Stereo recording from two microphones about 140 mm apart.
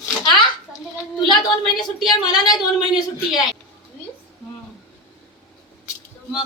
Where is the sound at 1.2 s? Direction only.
30° left (ahead or behind).